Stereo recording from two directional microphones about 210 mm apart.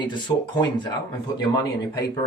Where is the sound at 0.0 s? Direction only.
20° left (ahead or behind).